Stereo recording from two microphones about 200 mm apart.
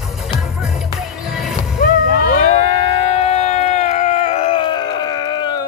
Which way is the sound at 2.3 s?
35° left (ahead or behind).